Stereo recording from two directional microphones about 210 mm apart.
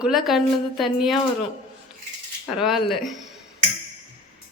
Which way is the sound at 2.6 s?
Centre (ahead or behind).